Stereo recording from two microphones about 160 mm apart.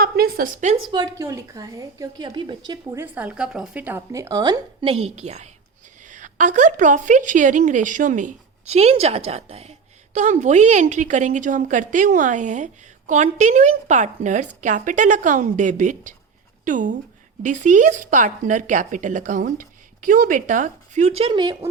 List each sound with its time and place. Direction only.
0.0 s a woman's voice: 70° right (ahead or behind); by 0.8 s 50° right (ahead or behind)
0.9 s a woman's voice: 25° right (ahead or behind)
2.6 s a woman's voice: 15° right (ahead or behind); by 21.5 s 35° right (ahead or behind)